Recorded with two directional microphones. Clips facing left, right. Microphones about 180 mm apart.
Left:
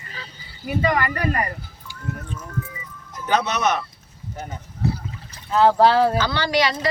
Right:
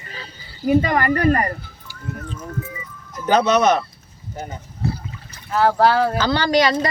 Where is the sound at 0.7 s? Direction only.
45° right (ahead or behind).